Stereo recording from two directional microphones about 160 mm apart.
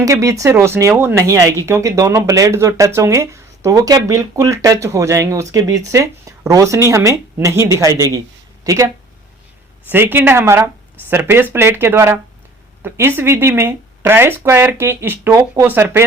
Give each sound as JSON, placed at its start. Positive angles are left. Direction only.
{"t": 0.0, "sound": "speech", "side_deg": -20}
{"t": 9.9, "sound": "speech", "side_deg": -15}